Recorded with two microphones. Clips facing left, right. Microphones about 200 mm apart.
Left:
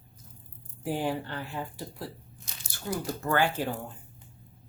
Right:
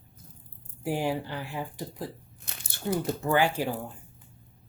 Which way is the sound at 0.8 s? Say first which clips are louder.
Right 1 dB; 10° right (ahead or behind).